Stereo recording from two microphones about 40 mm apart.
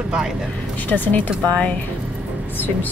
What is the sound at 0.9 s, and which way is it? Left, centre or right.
Speech, left.